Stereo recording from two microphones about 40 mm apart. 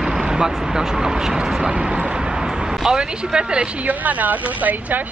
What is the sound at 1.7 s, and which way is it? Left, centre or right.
Speech, right.